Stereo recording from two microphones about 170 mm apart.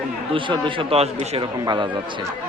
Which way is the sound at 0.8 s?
35° right (ahead or behind).